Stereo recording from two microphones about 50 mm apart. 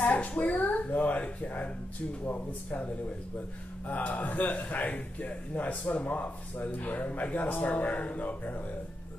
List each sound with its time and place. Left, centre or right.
0.1 s a man's voice: left